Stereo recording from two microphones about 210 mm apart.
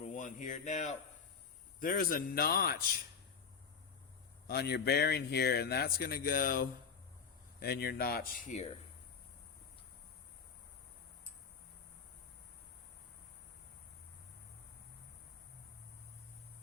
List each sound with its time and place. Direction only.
0.1 s speech: 40° left (ahead or behind)
4.4 s speech: 50° left (ahead or behind); by 8.7 s 35° left (ahead or behind)